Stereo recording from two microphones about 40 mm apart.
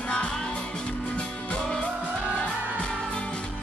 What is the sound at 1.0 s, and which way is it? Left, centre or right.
Music, left.